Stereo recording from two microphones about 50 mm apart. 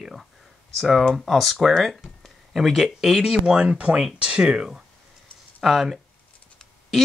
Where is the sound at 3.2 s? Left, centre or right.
Centre.